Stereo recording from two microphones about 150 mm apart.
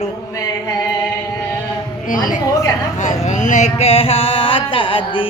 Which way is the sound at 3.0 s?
50° left (ahead or behind).